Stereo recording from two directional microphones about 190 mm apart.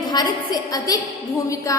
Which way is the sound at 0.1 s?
20° left (ahead or behind).